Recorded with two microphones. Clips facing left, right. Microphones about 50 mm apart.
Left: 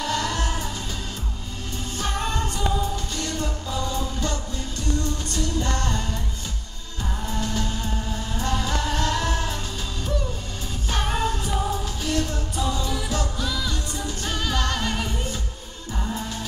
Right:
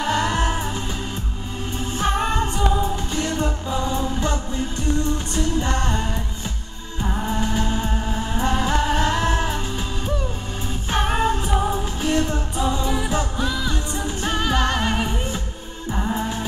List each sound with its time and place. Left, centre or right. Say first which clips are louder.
0.0 s music: right 5 dB; right
2.0 s music: right 6 dB; right
10.9 s music: right 5 dB; right